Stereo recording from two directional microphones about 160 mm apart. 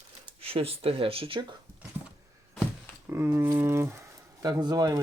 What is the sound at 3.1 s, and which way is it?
Speech, 15° right (ahead or behind).